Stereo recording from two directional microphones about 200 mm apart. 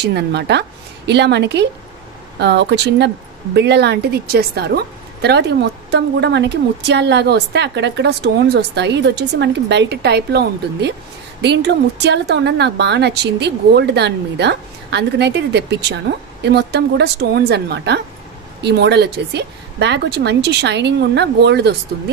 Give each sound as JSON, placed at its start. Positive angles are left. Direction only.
{"t": 0.1, "sound": "a woman's voice", "side_deg": -55}